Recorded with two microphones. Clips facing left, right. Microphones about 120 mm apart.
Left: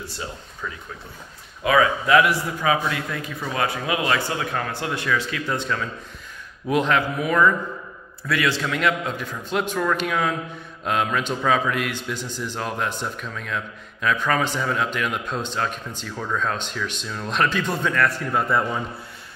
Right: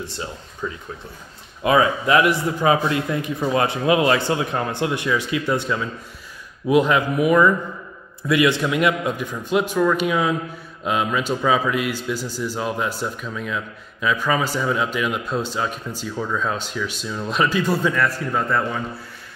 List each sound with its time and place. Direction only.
1.6 s a man's voice: 25° right (ahead or behind)
6.7 s a man's voice: 10° right (ahead or behind)